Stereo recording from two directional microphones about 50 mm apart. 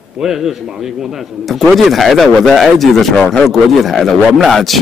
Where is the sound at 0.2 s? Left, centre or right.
Centre.